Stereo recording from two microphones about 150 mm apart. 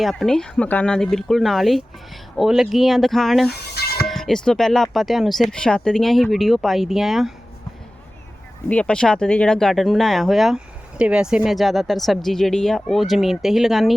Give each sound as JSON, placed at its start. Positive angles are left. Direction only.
{"t": 0.0, "sound": "speech", "side_deg": 0}
{"t": 3.5, "sound": "music", "side_deg": 90}
{"t": 4.0, "sound": "speech", "side_deg": 0}
{"t": 8.7, "sound": "speech", "side_deg": 5}